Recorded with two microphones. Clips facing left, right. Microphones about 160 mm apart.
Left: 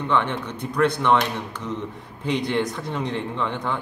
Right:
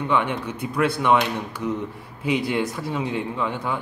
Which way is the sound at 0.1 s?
10° right (ahead or behind).